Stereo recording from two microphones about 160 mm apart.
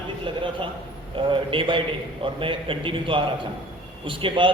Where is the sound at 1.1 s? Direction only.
35° right (ahead or behind).